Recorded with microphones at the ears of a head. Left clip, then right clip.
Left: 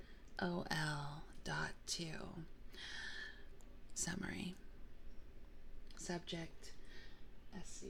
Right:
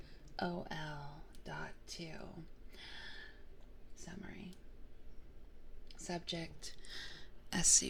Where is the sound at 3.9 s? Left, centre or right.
Left.